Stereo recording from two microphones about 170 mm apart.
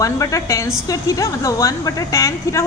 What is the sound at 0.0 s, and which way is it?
A woman's voice, 20° left (ahead or behind).